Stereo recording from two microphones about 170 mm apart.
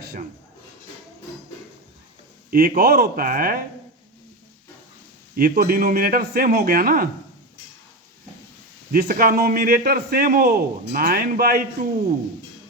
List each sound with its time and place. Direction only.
2.5 s a man's voice: 60° right (ahead or behind)
5.4 s a man's voice: 60° right (ahead or behind)
8.9 s a man's voice: 60° right (ahead or behind)